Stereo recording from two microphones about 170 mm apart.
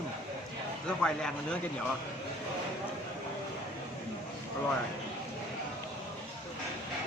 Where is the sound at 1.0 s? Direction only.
5° left (ahead or behind).